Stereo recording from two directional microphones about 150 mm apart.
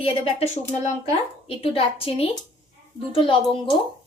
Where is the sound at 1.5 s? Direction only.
40° left (ahead or behind).